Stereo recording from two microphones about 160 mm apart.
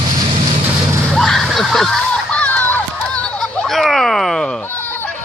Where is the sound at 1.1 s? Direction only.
Centre (ahead or behind).